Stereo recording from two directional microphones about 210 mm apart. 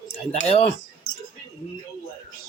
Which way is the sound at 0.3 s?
30° left (ahead or behind).